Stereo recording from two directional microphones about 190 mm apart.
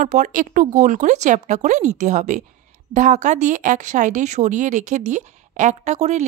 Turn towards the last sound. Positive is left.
turn(degrees=-40)  # may be behind; listen again after turning